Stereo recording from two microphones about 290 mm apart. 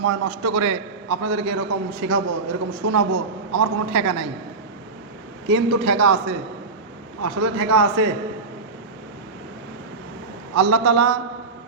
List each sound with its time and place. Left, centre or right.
0.0 s a man's voice: right
2.8 s a man's voice: right
5.5 s a man's voice: right
10.5 s a man's voice: right